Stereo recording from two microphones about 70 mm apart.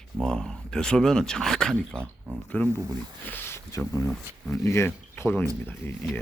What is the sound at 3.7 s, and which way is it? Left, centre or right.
Speech, left.